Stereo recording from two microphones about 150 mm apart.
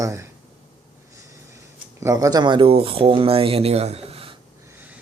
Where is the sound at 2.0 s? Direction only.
25° right (ahead or behind); by 4.3 s 40° right (ahead or behind).